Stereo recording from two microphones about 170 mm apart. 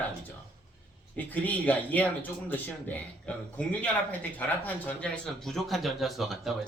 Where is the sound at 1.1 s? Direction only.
10° left (ahead or behind).